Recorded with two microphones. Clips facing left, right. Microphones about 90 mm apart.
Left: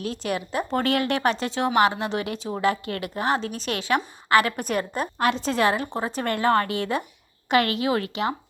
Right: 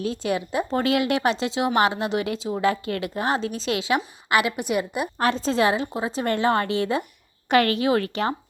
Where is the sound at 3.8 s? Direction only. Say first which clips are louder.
Left 1 dB; 15° right (ahead or behind).